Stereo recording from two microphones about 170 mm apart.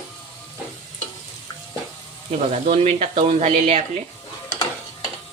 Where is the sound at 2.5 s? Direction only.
40° right (ahead or behind).